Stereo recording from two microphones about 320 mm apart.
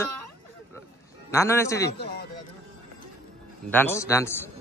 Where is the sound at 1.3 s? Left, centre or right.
Centre.